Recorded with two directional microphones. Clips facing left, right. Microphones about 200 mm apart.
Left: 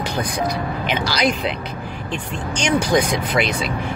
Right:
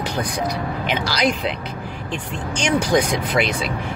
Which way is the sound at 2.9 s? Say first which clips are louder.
Even; centre (ahead or behind).